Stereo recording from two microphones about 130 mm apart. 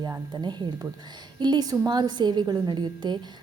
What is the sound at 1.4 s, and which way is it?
A woman's voice, 35° right (ahead or behind).